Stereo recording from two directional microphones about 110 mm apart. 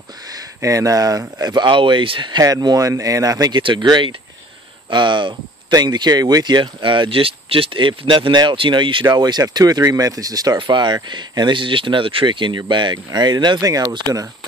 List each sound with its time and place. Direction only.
0.6 s speech: 30° right (ahead or behind); by 2.4 s 45° right (ahead or behind)
2.4 s speech: 35° right (ahead or behind)
9.1 s speech: 35° right (ahead or behind)